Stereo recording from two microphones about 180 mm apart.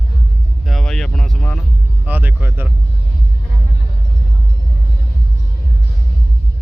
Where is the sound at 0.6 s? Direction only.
Centre (ahead or behind).